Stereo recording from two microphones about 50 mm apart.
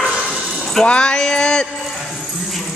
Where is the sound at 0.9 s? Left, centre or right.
Centre.